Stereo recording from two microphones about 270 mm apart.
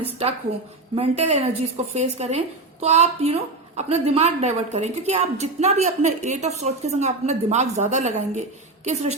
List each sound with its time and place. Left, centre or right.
0.0 s a woman's voice: right